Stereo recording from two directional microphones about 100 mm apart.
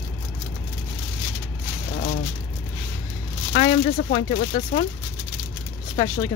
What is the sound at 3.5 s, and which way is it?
Speech, 85° left.